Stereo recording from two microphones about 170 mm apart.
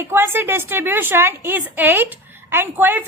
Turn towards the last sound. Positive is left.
turn(degrees=-10)  # may be behind; listen again after turning